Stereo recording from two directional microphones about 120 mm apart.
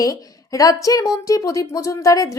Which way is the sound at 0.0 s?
30° left (ahead or behind).